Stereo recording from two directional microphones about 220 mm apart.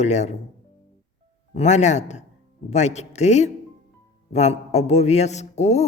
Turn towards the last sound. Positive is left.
turn(degrees=30)  # may be behind; listen again after turning